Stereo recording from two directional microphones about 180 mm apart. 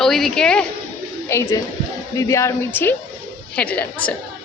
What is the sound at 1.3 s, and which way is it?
A woman's voice, 15° left (ahead or behind).